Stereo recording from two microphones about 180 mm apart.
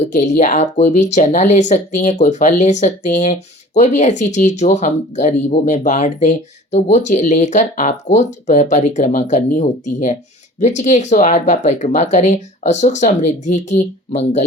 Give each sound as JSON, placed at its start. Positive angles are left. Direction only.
{"t": 0.0, "sound": "speech", "side_deg": 40}